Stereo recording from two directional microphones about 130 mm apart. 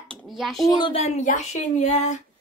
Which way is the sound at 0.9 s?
55° left (ahead or behind).